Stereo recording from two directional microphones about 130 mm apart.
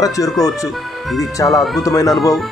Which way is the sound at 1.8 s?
25° left (ahead or behind).